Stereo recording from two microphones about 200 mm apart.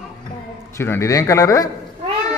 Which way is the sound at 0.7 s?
15° left (ahead or behind).